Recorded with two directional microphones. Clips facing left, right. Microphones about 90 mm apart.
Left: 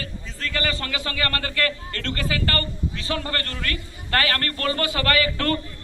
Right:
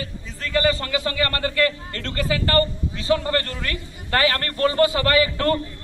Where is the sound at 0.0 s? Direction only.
20° right (ahead or behind).